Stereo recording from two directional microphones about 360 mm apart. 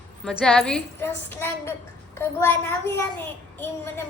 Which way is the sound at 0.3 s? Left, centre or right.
Centre.